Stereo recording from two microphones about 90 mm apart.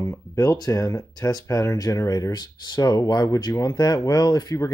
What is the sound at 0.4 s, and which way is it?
Speech, 40° left (ahead or behind).